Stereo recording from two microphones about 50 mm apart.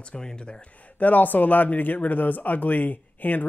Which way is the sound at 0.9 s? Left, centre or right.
Left.